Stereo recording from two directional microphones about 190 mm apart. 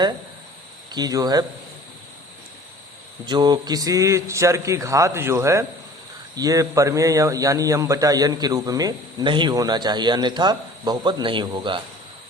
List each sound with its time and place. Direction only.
0.9 s speech: 20° right (ahead or behind)
3.2 s a man's voice: 20° right (ahead or behind)